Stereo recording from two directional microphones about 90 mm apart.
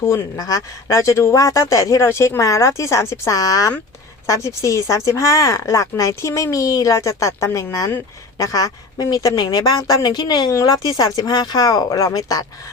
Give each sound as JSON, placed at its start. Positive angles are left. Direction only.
{"t": 0.0, "sound": "speech", "side_deg": 35}
{"t": 10.5, "sound": "speech", "side_deg": 40}